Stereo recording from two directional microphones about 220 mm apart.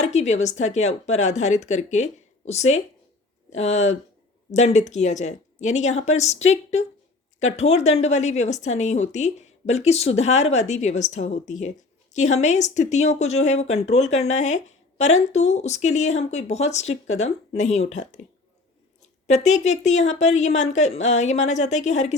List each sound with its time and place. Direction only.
0.0 s speech: 30° left (ahead or behind)
19.3 s speech: 30° left (ahead or behind)